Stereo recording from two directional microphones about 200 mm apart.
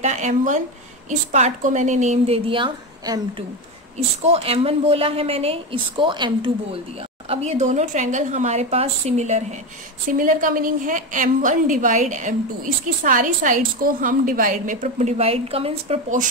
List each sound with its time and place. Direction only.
0.0 s a woman's voice: 35° right (ahead or behind)